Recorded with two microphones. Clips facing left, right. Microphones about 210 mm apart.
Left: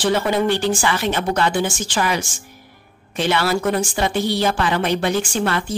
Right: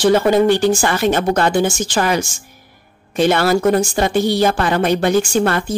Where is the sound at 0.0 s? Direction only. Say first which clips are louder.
Right 6 dB; 45° right (ahead or behind).